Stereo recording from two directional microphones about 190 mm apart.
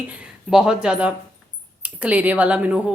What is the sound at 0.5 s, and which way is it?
A woman's voice, 5° right (ahead or behind).